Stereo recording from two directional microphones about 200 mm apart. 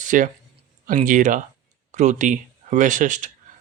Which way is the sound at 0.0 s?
40° right (ahead or behind).